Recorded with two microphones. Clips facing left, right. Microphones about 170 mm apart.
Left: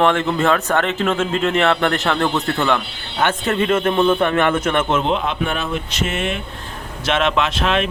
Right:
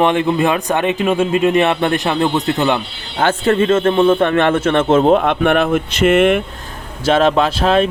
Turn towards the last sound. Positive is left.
turn(degrees=-35)  # may be behind; listen again after turning